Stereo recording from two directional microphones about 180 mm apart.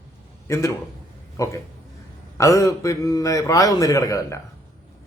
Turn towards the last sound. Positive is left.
turn(degrees=15)  # may be behind; listen again after turning